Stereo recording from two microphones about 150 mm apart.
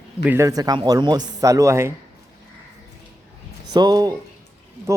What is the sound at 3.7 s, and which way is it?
Speech, 25° right (ahead or behind).